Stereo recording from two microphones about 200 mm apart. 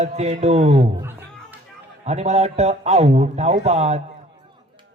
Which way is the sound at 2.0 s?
35° right (ahead or behind).